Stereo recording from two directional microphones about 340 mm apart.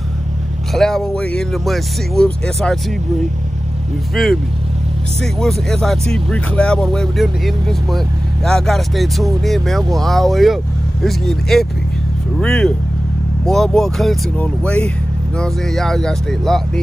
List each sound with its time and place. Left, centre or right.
0.7 s speech: centre
4.1 s speech: centre